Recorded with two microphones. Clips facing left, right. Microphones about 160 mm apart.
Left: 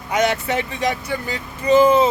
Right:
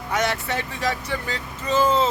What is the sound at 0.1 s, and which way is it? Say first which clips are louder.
Speech: left 5 dB; 20° left (ahead or behind).